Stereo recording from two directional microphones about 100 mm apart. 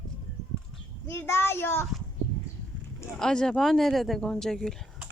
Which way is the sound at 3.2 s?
5° left (ahead or behind).